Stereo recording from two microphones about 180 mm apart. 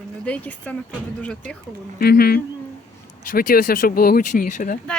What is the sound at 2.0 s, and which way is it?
Speech, 60° left (ahead or behind).